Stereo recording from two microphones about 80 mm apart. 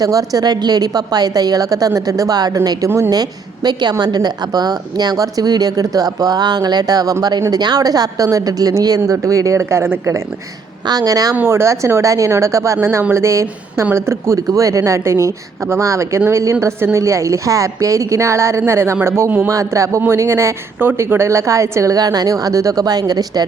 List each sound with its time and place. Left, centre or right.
0.0 s a woman's voice: right
10.8 s a woman's voice: right
11.3 s speech: right
14.3 s a woman's voice: right
20.7 s a woman's voice: right